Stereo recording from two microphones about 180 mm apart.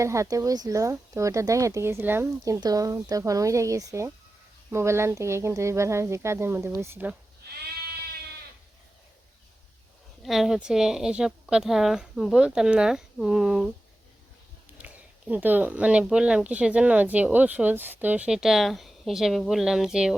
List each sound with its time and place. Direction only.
0.0 s speech: 15° right (ahead or behind)
10.2 s speech: centre (ahead or behind)
14.8 s speech: 10° right (ahead or behind)